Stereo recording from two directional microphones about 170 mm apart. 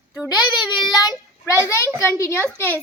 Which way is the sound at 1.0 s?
25° left (ahead or behind).